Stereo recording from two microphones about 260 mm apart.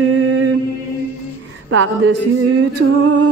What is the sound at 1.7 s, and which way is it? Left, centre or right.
Music, right.